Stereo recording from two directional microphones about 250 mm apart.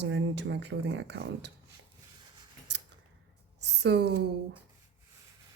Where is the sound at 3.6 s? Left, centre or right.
Right.